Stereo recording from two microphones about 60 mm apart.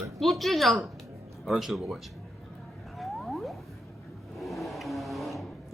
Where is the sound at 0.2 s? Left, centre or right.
Centre.